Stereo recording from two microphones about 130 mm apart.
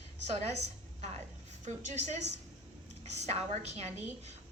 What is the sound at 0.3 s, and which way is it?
Speech, 55° right (ahead or behind).